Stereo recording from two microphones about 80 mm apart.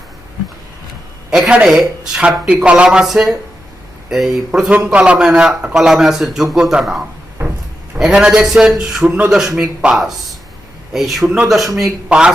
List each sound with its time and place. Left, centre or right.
1.3 s a man's voice: centre
7.4 s drawer open or close: right
7.9 s a man's voice: centre